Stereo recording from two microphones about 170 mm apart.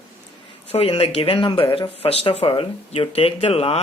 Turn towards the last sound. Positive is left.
turn(degrees=35)  # may be behind; listen again after turning